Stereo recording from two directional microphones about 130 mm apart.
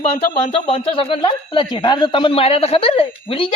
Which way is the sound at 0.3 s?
75° left (ahead or behind).